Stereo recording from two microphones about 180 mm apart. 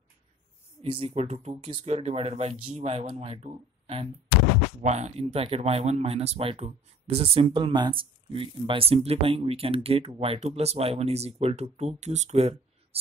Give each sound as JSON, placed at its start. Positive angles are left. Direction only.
{"t": 0.8, "sound": "speech", "side_deg": -35}